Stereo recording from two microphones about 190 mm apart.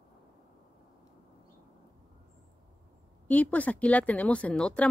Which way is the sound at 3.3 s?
10° left (ahead or behind).